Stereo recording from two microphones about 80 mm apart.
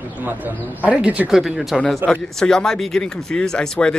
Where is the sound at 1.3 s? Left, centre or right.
Centre.